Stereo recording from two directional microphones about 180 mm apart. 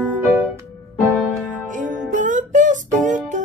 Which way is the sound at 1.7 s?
45° right (ahead or behind).